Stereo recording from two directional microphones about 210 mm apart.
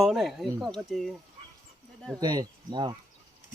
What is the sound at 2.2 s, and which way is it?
Speech, 20° right (ahead or behind).